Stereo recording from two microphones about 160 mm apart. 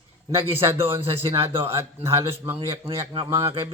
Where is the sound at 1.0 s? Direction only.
35° right (ahead or behind).